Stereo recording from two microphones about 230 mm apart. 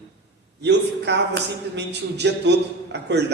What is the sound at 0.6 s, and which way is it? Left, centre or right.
A man's voice, right.